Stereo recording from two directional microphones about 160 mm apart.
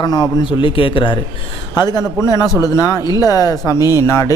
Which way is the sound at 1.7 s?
25° left (ahead or behind).